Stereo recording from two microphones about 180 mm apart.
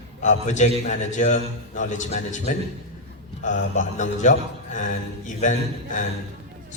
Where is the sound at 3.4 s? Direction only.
45° left (ahead or behind).